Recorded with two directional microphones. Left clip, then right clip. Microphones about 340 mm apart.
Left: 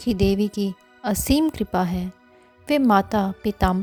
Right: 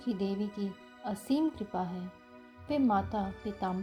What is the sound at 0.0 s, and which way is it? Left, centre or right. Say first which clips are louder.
A woman's voice: left 13 dB; left.